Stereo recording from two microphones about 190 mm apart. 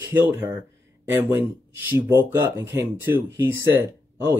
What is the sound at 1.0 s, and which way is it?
Speech, 10° right (ahead or behind).